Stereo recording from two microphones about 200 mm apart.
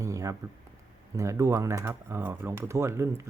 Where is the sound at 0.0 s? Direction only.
15° right (ahead or behind).